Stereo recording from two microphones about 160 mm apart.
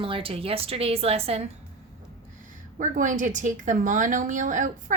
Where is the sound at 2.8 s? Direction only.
50° right (ahead or behind).